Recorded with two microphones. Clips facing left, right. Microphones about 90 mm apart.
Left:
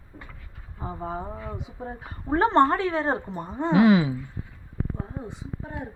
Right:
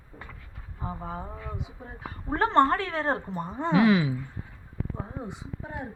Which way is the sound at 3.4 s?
5° right (ahead or behind).